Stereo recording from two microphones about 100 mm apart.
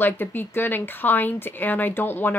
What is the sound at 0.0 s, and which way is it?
Speech, 20° left (ahead or behind).